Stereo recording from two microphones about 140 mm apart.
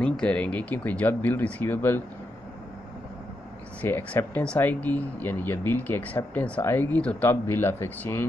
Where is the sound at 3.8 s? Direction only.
10° left (ahead or behind).